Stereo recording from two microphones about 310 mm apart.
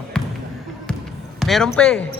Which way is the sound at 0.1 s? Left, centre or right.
Centre.